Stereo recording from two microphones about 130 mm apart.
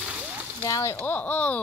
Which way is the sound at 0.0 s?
10° right (ahead or behind).